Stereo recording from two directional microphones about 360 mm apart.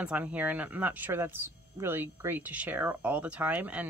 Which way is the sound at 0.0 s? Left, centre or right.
Centre.